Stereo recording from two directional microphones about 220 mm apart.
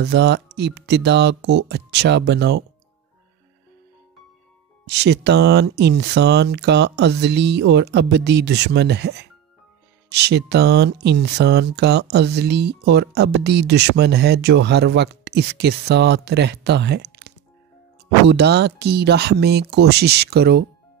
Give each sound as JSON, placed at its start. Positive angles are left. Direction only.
{"t": 0.0, "sound": "speech", "side_deg": -50}
{"t": 4.8, "sound": "speech", "side_deg": -50}